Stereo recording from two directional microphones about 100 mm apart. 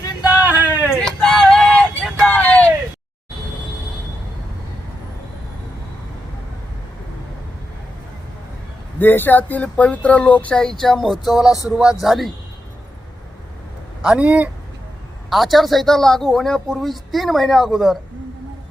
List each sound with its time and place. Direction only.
0.4 s a sound: 15° right (ahead or behind)
0.9 s a sound: 5° left (ahead or behind)
2.1 s vehicle: 15° left (ahead or behind)
9.0 s speech: 20° left (ahead or behind); by 12.3 s centre (ahead or behind)
14.0 s a man's voice: 10° right (ahead or behind)
15.3 s speech: centre (ahead or behind)